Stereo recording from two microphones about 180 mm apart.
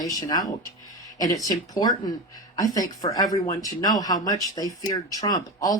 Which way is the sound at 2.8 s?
20° left (ahead or behind).